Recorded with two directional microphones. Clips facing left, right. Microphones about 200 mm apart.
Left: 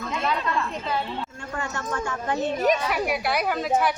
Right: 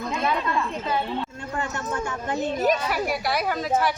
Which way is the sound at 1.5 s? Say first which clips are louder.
Right 1 dB; 20° right (ahead or behind).